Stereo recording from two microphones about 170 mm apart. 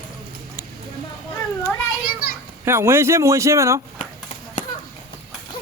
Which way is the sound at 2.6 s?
15° right (ahead or behind).